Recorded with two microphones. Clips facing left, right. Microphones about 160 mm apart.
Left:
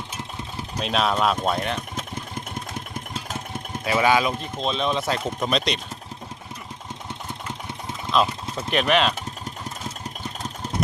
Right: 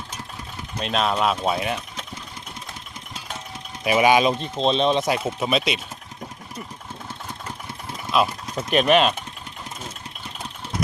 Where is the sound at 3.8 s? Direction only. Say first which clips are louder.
Right 3 dB; 15° right (ahead or behind).